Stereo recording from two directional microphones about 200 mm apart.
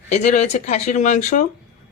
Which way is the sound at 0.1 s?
35° left (ahead or behind).